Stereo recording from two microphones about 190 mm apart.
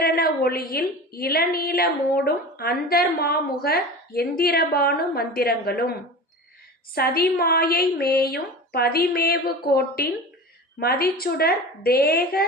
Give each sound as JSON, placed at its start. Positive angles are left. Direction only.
{"t": 0.0, "sound": "a woman's voice", "side_deg": 55}